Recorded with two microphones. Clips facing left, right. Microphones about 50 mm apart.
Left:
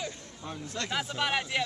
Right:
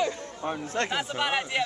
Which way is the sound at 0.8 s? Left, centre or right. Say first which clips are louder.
Left 1 dB; centre.